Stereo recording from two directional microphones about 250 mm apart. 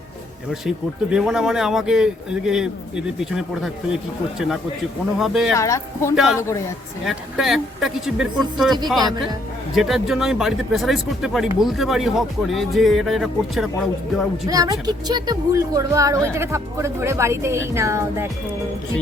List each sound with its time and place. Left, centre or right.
1.1 s speech: centre
5.5 s speech: centre
6.1 s speech: centre
14.4 s speech: centre